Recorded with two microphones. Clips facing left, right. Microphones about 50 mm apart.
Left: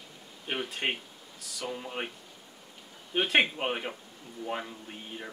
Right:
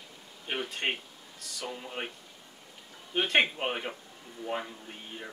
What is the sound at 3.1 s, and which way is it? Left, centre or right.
Speech, centre.